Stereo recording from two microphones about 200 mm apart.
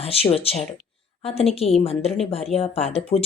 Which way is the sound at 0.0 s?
30° left (ahead or behind).